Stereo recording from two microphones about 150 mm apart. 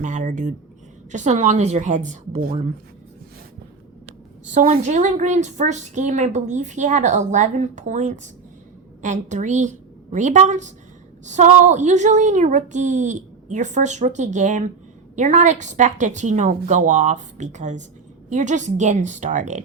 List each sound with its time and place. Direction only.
0.0 s a woman's voice: 55° right (ahead or behind)
4.5 s a woman's voice: 50° right (ahead or behind)